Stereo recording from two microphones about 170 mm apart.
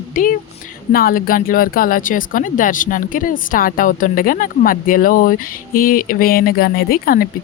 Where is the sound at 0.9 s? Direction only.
60° left (ahead or behind).